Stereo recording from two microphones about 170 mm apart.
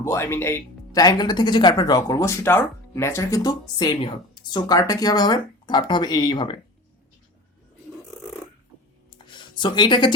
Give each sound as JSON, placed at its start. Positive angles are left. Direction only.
{"t": 0.0, "sound": "speech", "side_deg": 15}
{"t": 9.0, "sound": "music", "side_deg": 25}